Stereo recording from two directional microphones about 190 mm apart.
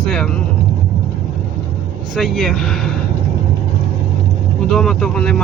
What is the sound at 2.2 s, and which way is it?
Speech, centre (ahead or behind).